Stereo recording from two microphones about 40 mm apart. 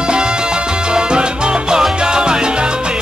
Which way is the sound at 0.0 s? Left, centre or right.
Right.